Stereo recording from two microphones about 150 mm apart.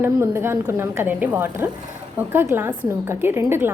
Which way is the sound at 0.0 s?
15° right (ahead or behind).